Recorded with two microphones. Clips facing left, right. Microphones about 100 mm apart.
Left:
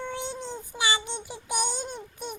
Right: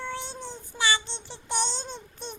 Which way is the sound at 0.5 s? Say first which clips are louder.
Right 2 dB; 15° left (ahead or behind).